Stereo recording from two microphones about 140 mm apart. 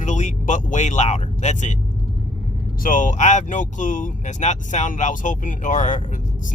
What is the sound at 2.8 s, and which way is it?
Speech, 75° left (ahead or behind).